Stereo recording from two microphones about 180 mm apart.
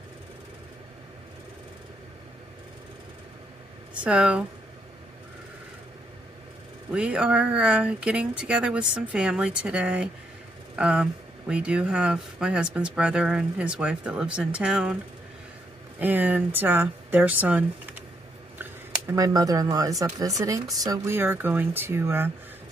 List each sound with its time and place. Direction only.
4.0 s speech: 5° right (ahead or behind)
6.9 s speech: 5° right (ahead or behind)
16.0 s speech: 10° right (ahead or behind)
18.9 s speech: 20° right (ahead or behind)